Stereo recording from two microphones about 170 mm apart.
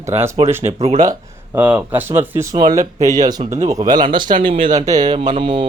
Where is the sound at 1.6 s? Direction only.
10° right (ahead or behind).